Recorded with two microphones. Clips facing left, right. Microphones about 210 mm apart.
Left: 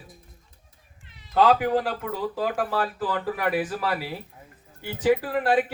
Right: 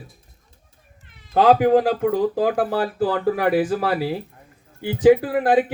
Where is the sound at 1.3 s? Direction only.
55° right (ahead or behind).